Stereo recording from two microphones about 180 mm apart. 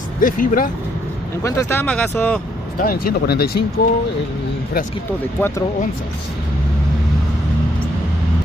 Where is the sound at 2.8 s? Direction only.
55° left (ahead or behind).